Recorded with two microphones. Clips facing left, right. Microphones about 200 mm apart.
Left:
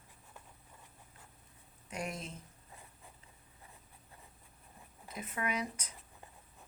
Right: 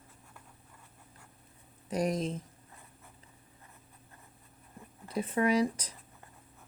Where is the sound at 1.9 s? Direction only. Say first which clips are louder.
Right 11 dB; 35° right (ahead or behind).